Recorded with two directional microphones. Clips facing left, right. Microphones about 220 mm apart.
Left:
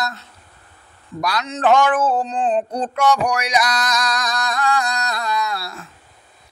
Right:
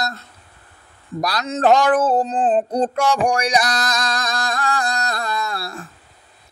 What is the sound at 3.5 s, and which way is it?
Music, 30° right (ahead or behind).